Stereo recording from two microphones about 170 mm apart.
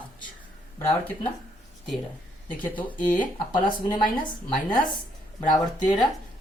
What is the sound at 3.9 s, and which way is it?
Speech, 25° left (ahead or behind).